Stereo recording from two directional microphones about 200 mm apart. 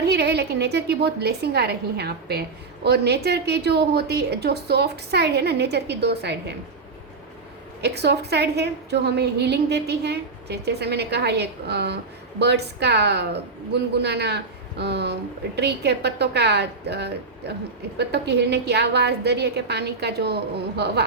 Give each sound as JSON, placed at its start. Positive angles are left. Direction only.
{"t": 0.0, "sound": "a woman's voice", "side_deg": -55}
{"t": 7.8, "sound": "a woman's voice", "side_deg": -55}